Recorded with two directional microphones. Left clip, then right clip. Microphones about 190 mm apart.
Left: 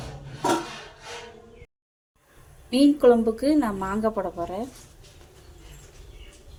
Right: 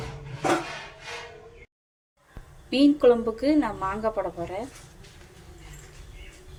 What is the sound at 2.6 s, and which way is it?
A woman's voice, 20° left (ahead or behind).